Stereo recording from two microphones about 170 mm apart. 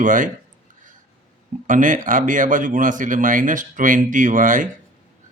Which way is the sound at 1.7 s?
50° right (ahead or behind).